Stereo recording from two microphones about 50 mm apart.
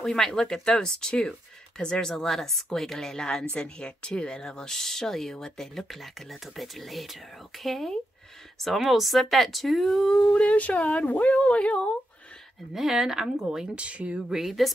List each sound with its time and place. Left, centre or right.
0.0 s speech: centre
10.3 s speech: left
12.7 s speech: centre
13.7 s speech: right
14.3 s speech: centre